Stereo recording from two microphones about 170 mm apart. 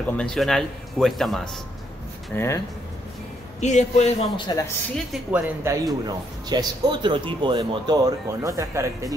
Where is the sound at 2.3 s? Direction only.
10° left (ahead or behind).